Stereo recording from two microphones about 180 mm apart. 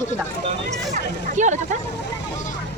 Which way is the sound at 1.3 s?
40° right (ahead or behind).